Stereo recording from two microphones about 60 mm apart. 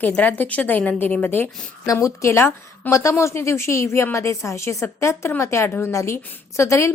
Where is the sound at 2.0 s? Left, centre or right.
Left.